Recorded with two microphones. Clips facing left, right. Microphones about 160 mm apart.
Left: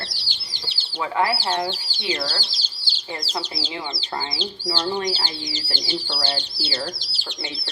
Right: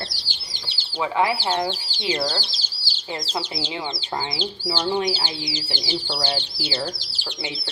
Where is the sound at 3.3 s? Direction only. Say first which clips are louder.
Right 1 dB; 25° right (ahead or behind).